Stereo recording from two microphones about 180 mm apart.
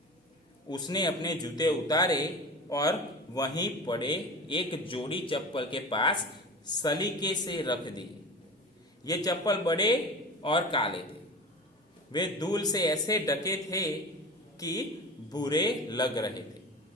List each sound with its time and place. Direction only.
0.7 s a man's voice: 25° left (ahead or behind)
9.0 s a man's voice: 20° left (ahead or behind)
12.1 s a man's voice: 25° left (ahead or behind)